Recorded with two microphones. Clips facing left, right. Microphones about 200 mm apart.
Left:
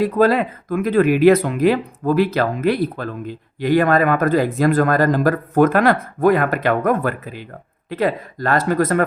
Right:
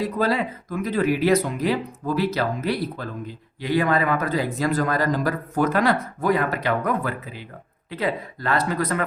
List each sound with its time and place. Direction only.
0.0 s speech: 55° left (ahead or behind)